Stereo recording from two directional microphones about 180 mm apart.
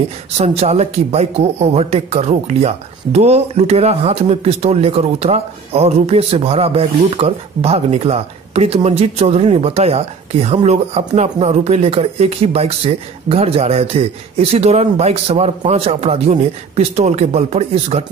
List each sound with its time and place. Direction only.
0.4 s speech: 35° right (ahead or behind)